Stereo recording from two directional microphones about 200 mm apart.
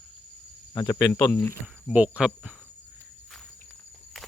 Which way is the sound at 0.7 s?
15° left (ahead or behind).